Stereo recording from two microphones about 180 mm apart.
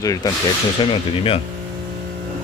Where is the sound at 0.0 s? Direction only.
20° left (ahead or behind).